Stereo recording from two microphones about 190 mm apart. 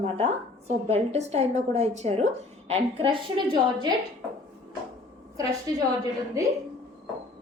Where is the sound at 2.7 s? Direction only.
25° right (ahead or behind).